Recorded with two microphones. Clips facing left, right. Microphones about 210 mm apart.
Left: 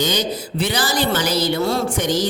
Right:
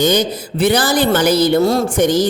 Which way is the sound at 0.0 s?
50° right (ahead or behind).